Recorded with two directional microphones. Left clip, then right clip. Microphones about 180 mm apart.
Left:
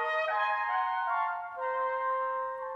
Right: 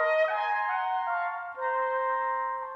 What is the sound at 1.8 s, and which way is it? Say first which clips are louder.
Music: right 2 dB; 15° right (ahead or behind).